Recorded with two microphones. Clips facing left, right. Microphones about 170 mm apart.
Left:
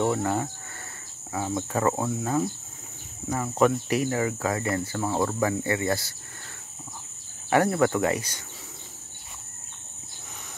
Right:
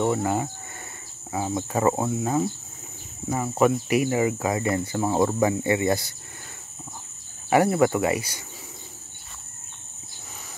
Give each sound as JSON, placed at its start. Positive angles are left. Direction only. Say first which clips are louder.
{"t": 0.0, "sound": "speech", "louder": "right 1 dB", "side_deg": -5}
{"t": 7.4, "sound": "speech", "louder": "right 2 dB", "side_deg": -10}